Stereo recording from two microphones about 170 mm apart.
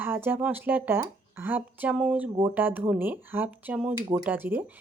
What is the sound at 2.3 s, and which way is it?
Speech, 25° right (ahead or behind).